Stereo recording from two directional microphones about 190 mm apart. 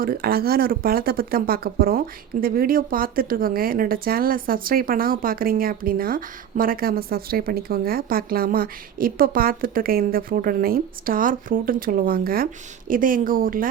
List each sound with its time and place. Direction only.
0.0 s speech: 50° right (ahead or behind)